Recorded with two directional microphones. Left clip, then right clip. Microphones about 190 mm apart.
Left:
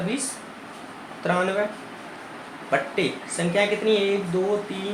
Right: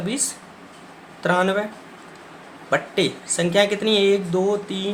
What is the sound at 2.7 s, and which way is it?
Speech, 35° right (ahead or behind).